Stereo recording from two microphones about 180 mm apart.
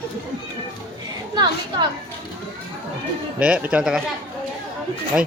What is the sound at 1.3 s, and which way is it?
Speech, 25° right (ahead or behind).